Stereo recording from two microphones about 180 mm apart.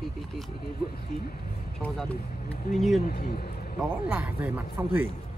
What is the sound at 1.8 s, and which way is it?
Speech, centre (ahead or behind).